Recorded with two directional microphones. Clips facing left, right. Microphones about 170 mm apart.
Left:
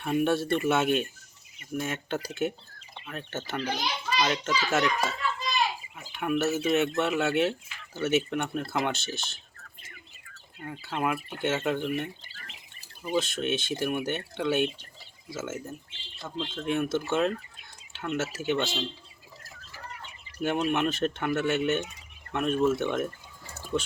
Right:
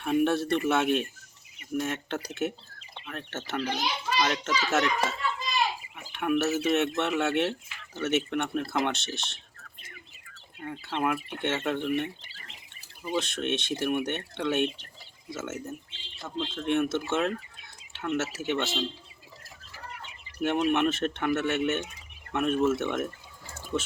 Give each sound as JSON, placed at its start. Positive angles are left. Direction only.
{"t": 0.0, "sound": "a child's voice", "side_deg": 0}
{"t": 6.1, "sound": "a child's voice", "side_deg": 0}
{"t": 10.6, "sound": "a child's voice", "side_deg": 5}
{"t": 17.1, "sound": "a sound", "side_deg": 0}
{"t": 18.2, "sound": "a child's voice", "side_deg": 0}
{"t": 20.4, "sound": "a child's voice", "side_deg": 0}